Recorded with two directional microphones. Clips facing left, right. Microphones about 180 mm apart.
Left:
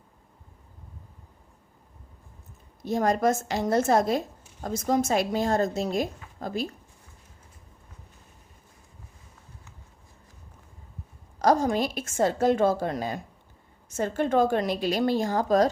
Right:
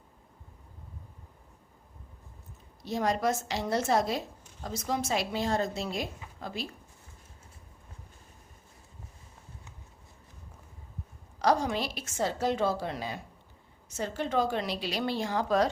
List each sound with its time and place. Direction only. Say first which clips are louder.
2.8 s a woman's voice: left 5 dB; 50° left (ahead or behind)
11.3 s a woman's voice: left 5 dB; 45° left (ahead or behind)